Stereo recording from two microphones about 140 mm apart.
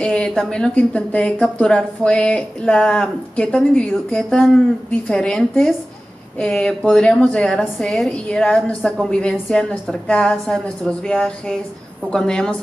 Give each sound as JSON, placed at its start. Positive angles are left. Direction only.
{"t": 0.0, "sound": "a woman's voice", "side_deg": 5}